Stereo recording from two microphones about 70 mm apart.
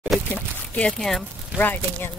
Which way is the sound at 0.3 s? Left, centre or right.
Centre.